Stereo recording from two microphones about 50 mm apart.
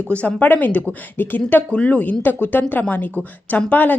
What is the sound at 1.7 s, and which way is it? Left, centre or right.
A woman's voice, left.